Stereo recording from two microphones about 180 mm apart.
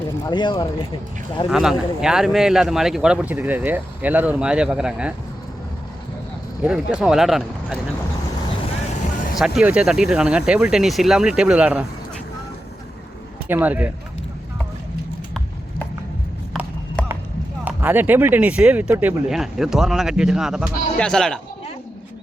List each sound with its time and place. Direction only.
0.3 s speech: 25° left (ahead or behind)
1.5 s speech: 5° right (ahead or behind)
6.6 s speech: 5° right (ahead or behind)
9.3 s speech: 5° right (ahead or behind)
13.5 s speech: 10° right (ahead or behind)
17.0 s a sound: 5° left (ahead or behind)
17.7 s speech: 10° right (ahead or behind)